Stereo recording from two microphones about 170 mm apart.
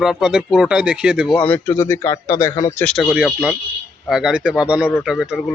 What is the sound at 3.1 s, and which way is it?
Speech, 5° right (ahead or behind).